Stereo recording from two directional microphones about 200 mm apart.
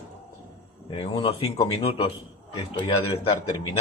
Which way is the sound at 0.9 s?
30° left (ahead or behind).